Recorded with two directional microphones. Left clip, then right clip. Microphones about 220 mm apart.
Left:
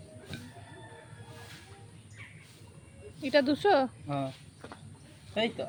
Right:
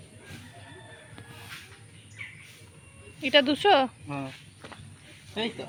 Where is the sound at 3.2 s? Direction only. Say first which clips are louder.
Right 4 dB; 5° left (ahead or behind).